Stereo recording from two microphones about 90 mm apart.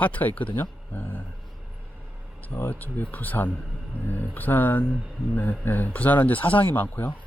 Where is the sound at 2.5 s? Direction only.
20° left (ahead or behind).